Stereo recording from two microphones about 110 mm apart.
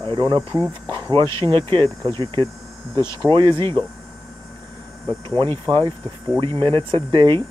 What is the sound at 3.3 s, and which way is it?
Speech, 50° right (ahead or behind).